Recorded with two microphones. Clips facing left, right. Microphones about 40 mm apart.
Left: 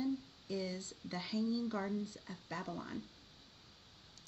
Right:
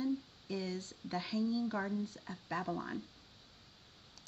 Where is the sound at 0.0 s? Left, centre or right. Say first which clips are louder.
Right 2 dB; centre.